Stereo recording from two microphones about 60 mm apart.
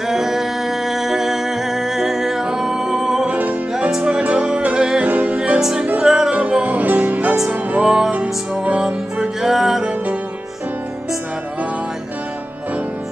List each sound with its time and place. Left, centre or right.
0.1 s music: centre
3.3 s music: right
3.9 s music: centre
5.6 s music: centre; by 7.3 s right
7.7 s music: centre